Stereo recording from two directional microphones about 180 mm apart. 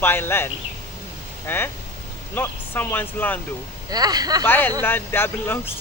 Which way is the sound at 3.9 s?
20° right (ahead or behind).